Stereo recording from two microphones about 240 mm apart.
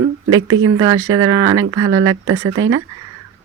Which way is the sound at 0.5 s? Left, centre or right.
Right.